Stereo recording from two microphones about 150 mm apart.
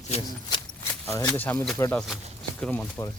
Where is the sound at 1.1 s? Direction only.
15° left (ahead or behind).